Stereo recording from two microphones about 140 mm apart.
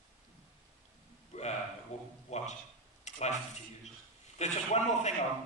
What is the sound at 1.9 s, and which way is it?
Speech, 55° left (ahead or behind).